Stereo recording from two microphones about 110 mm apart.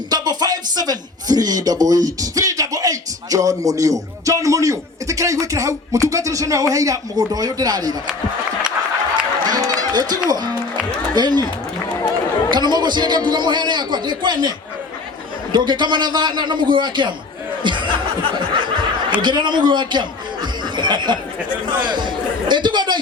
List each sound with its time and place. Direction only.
0.1 s speech: 40° right (ahead or behind)
9.4 s speech: 35° right (ahead or behind)
12.5 s a man's voice: 40° right (ahead or behind)
15.5 s a man's voice: 45° right (ahead or behind)
17.6 s a sound: 45° right (ahead or behind)
19.2 s a man's voice: 45° right (ahead or behind)